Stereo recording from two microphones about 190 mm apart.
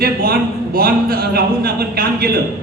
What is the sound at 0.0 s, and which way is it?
Speech, 50° right (ahead or behind).